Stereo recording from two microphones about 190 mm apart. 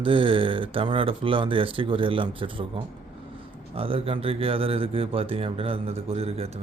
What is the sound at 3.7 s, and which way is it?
Speech, 30° right (ahead or behind).